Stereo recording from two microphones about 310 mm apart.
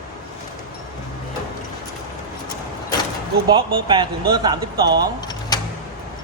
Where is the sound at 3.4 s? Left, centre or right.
Centre.